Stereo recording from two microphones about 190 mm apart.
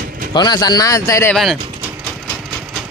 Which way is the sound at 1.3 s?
Centre (ahead or behind).